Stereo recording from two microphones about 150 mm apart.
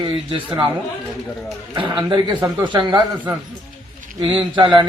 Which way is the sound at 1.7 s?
35° right (ahead or behind).